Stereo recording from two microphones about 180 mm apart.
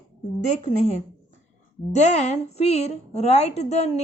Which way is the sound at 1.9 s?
40° left (ahead or behind).